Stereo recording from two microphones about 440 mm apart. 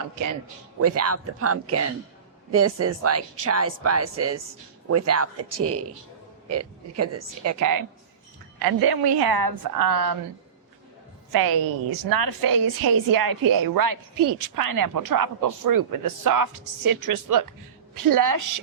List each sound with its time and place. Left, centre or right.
0.8 s a woman's voice: right
8.5 s a woman's voice: right
11.3 s a woman's voice: right